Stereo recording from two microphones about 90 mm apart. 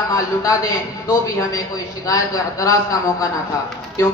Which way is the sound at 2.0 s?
40° left (ahead or behind).